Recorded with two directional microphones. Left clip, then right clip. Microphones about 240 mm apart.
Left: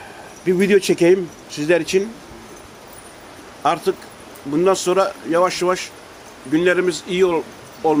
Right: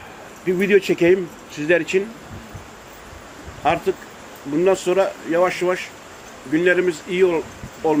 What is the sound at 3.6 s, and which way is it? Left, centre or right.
Speech, centre.